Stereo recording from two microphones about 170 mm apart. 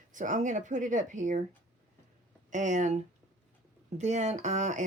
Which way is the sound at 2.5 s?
45° right (ahead or behind).